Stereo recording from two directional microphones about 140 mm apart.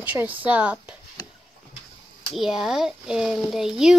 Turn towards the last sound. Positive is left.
turn(degrees=-5)  # may be behind; listen again after turning